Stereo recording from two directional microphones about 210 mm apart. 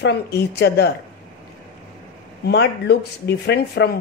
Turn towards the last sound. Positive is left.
turn(degrees=55)  # may be behind; listen again after turning